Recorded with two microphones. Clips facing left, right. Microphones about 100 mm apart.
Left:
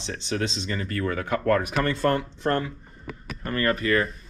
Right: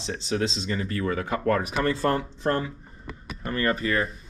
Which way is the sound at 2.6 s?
Centre (ahead or behind).